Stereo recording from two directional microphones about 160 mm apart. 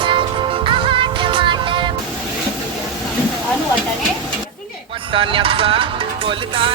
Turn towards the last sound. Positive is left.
turn(degrees=-35)  # may be behind; listen again after turning